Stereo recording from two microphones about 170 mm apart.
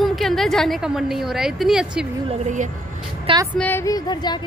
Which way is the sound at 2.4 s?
45° right (ahead or behind).